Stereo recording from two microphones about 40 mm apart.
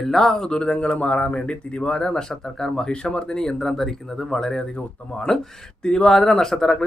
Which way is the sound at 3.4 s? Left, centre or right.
Centre.